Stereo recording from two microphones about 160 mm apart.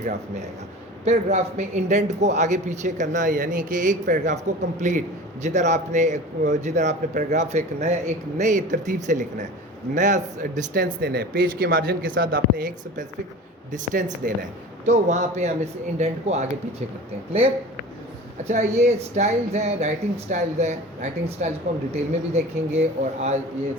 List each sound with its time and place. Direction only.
1.0 s a man's voice: 45° right (ahead or behind)
18.4 s a man's voice: 45° right (ahead or behind)